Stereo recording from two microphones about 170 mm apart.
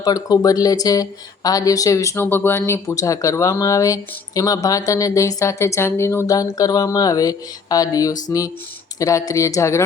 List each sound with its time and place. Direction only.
0.0 s speech: 20° left (ahead or behind)